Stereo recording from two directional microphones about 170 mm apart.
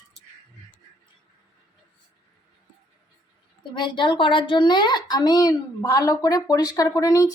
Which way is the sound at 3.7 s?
30° left (ahead or behind).